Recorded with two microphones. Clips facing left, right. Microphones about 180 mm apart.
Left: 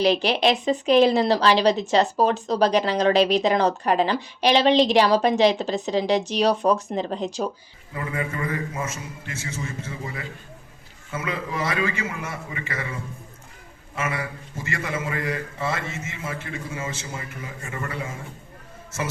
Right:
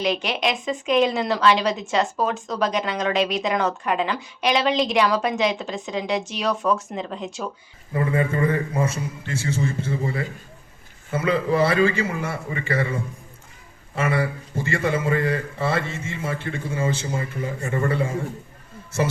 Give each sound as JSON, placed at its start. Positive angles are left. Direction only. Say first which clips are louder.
{"t": 0.0, "sound": "speech", "louder": "left 4 dB", "side_deg": 35}
{"t": 7.9, "sound": "a man's voice", "louder": "right 7 dB", "side_deg": -30}
{"t": 13.9, "sound": "a man's voice", "louder": "right 6 dB", "side_deg": -35}